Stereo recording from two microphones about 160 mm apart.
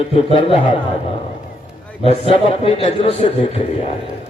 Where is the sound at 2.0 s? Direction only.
35° left (ahead or behind).